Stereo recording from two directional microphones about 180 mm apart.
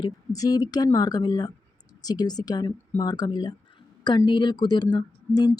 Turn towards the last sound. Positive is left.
turn(degrees=20)  # may be behind; listen again after turning